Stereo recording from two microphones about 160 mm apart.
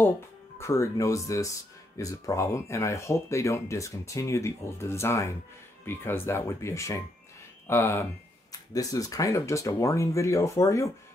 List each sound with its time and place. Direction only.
0.6 s speech: 15° left (ahead or behind)